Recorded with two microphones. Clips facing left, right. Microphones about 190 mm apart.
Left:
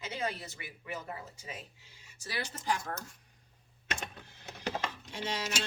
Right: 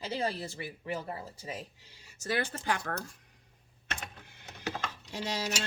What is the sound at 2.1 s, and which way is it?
Speech, 55° right (ahead or behind).